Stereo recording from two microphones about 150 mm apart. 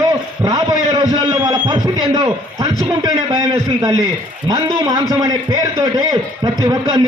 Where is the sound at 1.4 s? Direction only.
25° right (ahead or behind).